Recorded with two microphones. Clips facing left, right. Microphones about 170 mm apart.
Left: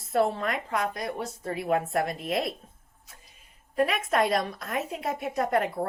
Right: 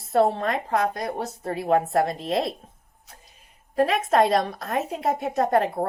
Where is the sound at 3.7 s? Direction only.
30° right (ahead or behind).